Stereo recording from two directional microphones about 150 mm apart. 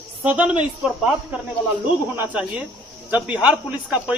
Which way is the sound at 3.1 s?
10° right (ahead or behind).